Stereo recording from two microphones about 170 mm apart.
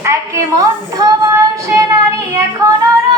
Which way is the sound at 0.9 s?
20° right (ahead or behind).